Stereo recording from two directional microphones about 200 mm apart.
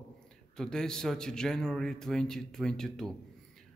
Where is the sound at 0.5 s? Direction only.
5° left (ahead or behind).